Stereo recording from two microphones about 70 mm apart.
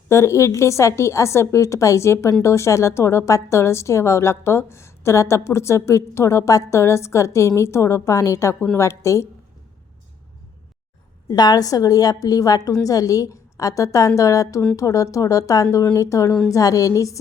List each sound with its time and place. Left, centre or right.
0.1 s a woman's voice: left
11.3 s a woman's voice: left